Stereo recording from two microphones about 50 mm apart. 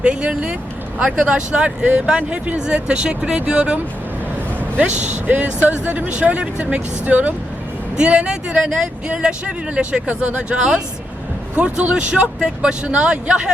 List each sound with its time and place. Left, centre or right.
0.0 s speech: right
4.8 s speech: right